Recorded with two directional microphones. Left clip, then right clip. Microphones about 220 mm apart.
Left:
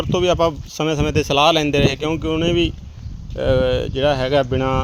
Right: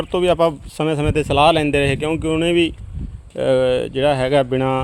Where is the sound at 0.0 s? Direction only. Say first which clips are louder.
Right 1 dB; 10° right (ahead or behind).